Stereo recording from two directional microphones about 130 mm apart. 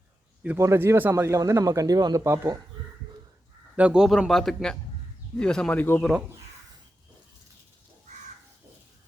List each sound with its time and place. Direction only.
0.4 s speech: 20° right (ahead or behind)
3.8 s a man's voice: 10° right (ahead or behind); by 6.0 s 15° left (ahead or behind)
6.0 s a man's voice: centre (ahead or behind)